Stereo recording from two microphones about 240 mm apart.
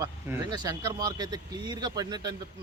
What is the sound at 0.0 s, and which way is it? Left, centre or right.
Speech, centre.